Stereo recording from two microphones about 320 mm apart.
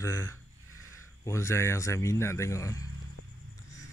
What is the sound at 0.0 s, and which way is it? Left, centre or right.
Speech, centre.